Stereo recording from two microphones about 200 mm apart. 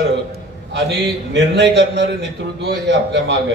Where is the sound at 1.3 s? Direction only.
60° right (ahead or behind).